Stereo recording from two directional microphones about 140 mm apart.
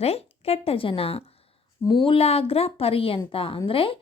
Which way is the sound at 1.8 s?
30° left (ahead or behind).